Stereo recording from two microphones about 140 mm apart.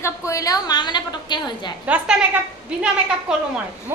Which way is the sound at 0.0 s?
20° left (ahead or behind).